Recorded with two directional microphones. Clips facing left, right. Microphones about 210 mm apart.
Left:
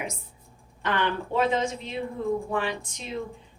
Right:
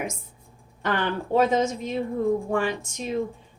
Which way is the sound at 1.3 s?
45° right (ahead or behind).